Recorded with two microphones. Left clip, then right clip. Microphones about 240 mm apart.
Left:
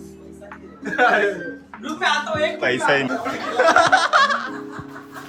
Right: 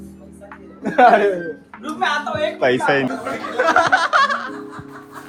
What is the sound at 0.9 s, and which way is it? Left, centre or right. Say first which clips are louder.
Speech: right 5 dB; centre.